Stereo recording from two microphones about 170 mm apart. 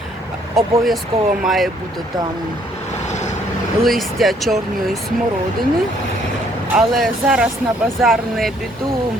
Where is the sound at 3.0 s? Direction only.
45° left (ahead or behind).